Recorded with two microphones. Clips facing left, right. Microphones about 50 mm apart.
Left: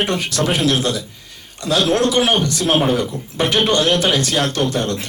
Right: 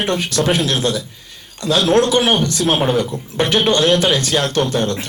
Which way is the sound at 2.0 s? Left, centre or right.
Right.